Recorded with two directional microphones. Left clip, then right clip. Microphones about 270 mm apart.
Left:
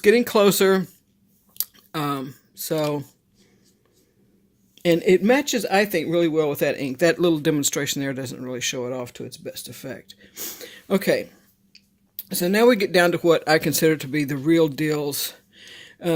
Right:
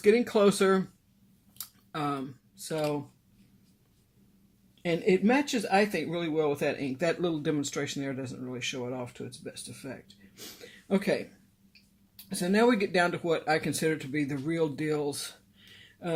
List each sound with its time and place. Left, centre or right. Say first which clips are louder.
0.0 s speech: left 7 dB; left
1.5 s typing: left 7 dB; left
4.8 s speech: left 9 dB; left